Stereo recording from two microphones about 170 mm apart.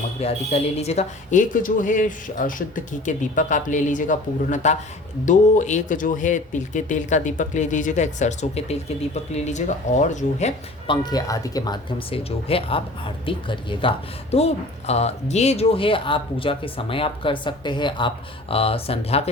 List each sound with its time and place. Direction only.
0.2 s speech: 40° left (ahead or behind)
10.8 s speech: 25° left (ahead or behind)